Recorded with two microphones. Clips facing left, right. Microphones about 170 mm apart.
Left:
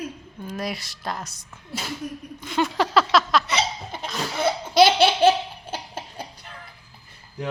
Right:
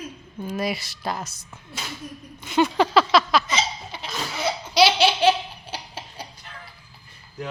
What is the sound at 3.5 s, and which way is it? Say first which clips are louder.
Laughter: left 1 dB; 55° left (ahead or behind).